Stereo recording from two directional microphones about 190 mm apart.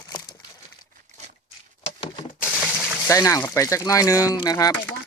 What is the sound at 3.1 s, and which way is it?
Speech, 15° left (ahead or behind).